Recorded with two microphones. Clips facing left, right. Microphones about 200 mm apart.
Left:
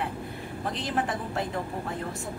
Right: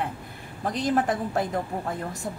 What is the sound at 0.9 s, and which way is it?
Speech, 45° right (ahead or behind).